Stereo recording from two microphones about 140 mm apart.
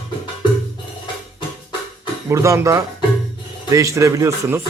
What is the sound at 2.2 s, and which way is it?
Speech, 20° right (ahead or behind).